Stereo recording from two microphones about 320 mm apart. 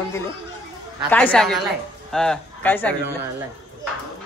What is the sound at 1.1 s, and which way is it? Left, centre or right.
A woman's voice, centre.